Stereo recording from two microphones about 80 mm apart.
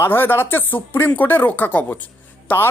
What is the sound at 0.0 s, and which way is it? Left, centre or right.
Speech, left.